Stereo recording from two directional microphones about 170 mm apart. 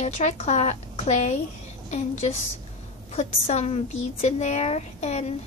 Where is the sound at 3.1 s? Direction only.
40° left (ahead or behind).